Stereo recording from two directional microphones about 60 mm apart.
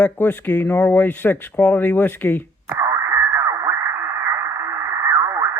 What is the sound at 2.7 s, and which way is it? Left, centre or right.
Radio, right.